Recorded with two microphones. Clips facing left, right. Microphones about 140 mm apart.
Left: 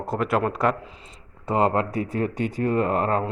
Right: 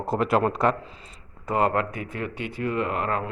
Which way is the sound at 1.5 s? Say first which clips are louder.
Left 2 dB; 25° left (ahead or behind).